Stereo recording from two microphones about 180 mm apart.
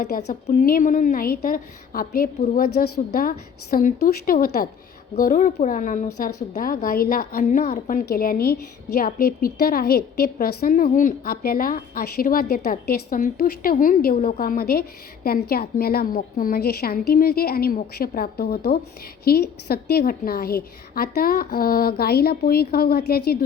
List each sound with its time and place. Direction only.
0.3 s a woman's voice: 45° left (ahead or behind)